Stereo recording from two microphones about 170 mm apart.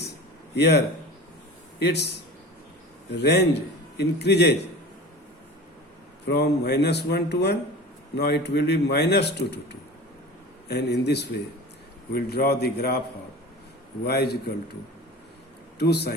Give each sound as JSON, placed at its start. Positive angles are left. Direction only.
{"t": 0.5, "sound": "a man's voice", "side_deg": 75}
{"t": 1.8, "sound": "a man's voice", "side_deg": 80}
{"t": 6.2, "sound": "a man's voice", "side_deg": 75}
{"t": 12.1, "sound": "a man's voice", "side_deg": 65}
{"t": 14.0, "sound": "a man's voice", "side_deg": 70}
{"t": 15.8, "sound": "a man's voice", "side_deg": 75}